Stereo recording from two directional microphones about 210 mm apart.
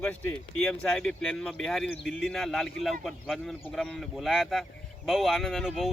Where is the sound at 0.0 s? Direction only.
5° left (ahead or behind).